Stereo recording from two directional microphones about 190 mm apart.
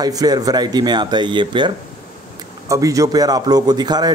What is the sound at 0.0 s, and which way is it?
Speech, 20° right (ahead or behind).